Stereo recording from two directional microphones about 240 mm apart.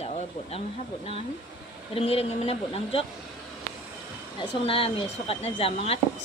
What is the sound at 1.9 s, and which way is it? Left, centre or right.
Speech, left.